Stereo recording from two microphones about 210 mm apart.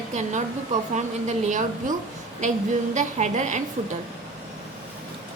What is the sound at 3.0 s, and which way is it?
Speech, 35° right (ahead or behind).